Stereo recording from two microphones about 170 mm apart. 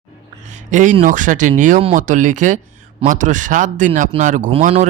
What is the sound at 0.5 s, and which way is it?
A man's voice, 45° right (ahead or behind).